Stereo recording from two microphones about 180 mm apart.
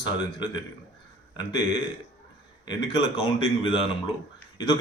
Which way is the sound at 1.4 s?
25° left (ahead or behind).